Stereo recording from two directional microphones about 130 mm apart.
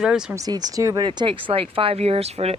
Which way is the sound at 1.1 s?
40° right (ahead or behind).